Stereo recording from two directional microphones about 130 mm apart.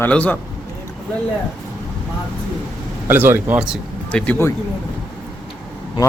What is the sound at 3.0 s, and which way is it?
Speech, 15° right (ahead or behind).